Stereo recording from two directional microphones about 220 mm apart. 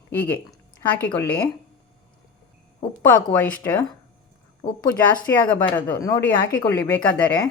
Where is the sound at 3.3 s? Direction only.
5° left (ahead or behind).